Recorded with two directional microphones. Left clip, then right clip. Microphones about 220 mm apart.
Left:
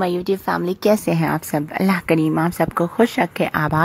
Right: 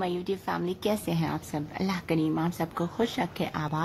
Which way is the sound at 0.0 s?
35° left (ahead or behind).